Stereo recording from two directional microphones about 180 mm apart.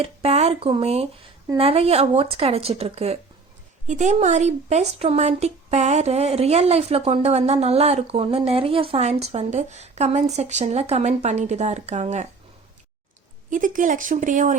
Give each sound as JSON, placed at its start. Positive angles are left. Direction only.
{"t": 0.0, "sound": "a woman's voice", "side_deg": -35}
{"t": 13.5, "sound": "speech", "side_deg": -45}